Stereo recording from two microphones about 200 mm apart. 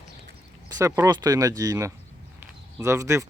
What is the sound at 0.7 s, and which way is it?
Speech, 15° right (ahead or behind).